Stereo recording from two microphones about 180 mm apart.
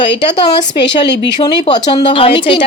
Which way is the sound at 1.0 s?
25° left (ahead or behind).